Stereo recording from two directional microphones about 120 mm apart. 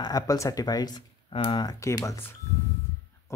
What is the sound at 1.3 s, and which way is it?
Speech, 45° left (ahead or behind).